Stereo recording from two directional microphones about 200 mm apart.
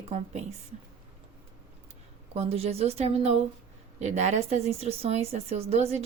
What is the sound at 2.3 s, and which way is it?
Speech, 30° right (ahead or behind).